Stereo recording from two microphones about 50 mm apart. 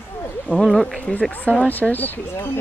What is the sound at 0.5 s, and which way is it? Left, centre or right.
Speech, centre.